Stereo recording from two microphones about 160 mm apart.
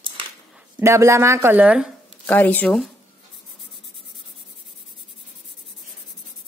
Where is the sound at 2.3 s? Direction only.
10° left (ahead or behind).